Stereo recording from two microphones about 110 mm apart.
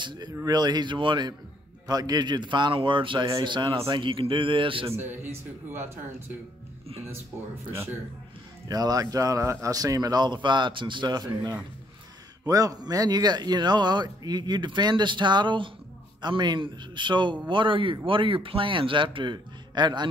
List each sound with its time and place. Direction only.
0.0 s a man's voice: 40° right (ahead or behind)
4.9 s a man's voice: 20° right (ahead or behind)
8.6 s a man's voice: 35° right (ahead or behind)